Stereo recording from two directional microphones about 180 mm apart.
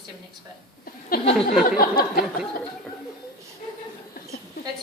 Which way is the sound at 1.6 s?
50° left (ahead or behind).